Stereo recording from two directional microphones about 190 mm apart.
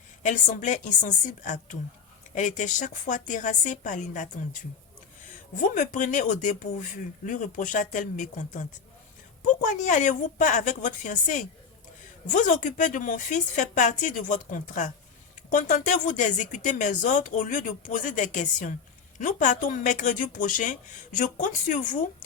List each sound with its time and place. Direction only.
0.2 s speech: 40° left (ahead or behind)
5.3 s speech: 45° left (ahead or behind)